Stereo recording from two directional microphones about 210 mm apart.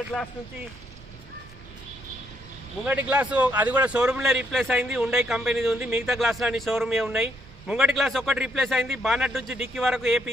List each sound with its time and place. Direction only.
0.1 s a man's voice: centre (ahead or behind)
2.8 s a man's voice: 5° right (ahead or behind)